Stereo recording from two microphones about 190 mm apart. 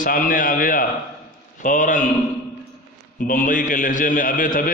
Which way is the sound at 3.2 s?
45° left (ahead or behind).